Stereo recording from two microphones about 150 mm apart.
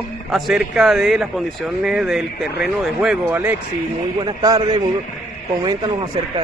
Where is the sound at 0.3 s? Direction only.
Centre (ahead or behind).